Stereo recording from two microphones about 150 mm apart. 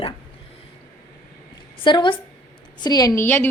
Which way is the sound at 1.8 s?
30° left (ahead or behind).